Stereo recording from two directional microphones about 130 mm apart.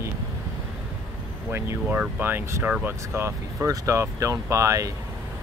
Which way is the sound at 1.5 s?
20° right (ahead or behind).